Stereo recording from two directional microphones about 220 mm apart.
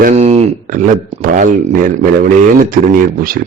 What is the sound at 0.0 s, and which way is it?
Speech, 30° right (ahead or behind).